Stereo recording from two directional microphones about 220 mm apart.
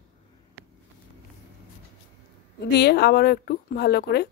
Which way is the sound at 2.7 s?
50° left (ahead or behind).